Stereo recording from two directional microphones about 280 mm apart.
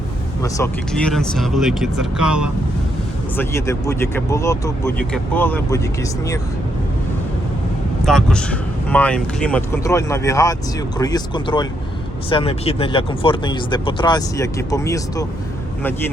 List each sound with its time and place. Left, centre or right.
0.4 s speech: centre
3.3 s speech: centre
8.0 s speech: centre